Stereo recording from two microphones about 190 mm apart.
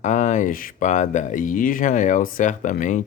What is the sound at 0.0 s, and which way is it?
Speech, 40° left (ahead or behind).